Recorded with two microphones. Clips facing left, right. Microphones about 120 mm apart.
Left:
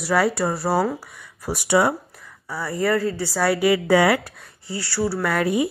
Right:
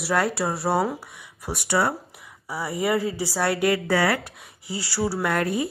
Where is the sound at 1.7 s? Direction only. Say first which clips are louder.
Left 4 dB; 10° left (ahead or behind).